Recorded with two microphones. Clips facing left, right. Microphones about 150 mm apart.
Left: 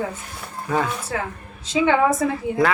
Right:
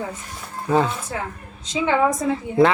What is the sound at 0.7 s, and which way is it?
Speech, 25° right (ahead or behind).